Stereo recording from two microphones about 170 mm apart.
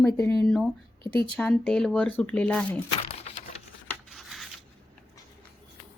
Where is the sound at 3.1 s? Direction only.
35° left (ahead or behind).